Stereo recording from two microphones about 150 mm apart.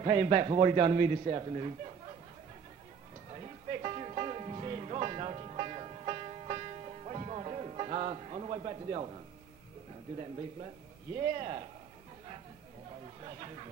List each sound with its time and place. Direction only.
0.0 s a man's voice: 40° right (ahead or behind)
3.3 s music: 40° right (ahead or behind)
11.3 s a man's voice: 40° right (ahead or behind)
13.2 s a man's voice: 40° right (ahead or behind)